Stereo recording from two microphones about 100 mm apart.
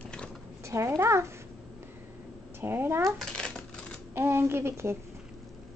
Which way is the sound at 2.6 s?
20° right (ahead or behind).